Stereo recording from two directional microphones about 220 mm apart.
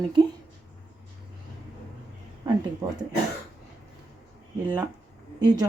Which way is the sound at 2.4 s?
15° right (ahead or behind).